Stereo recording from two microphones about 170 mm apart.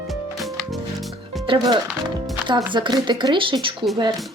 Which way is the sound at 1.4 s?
30° right (ahead or behind).